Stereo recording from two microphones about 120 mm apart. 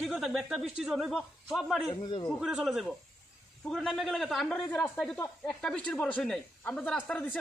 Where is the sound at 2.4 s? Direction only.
5° right (ahead or behind).